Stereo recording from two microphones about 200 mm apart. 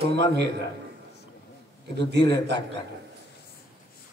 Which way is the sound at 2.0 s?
55° right (ahead or behind).